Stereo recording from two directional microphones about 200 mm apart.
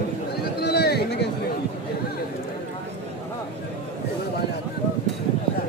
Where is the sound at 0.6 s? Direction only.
55° left (ahead or behind).